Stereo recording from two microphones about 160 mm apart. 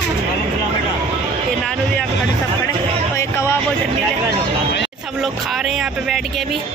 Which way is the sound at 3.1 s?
15° left (ahead or behind).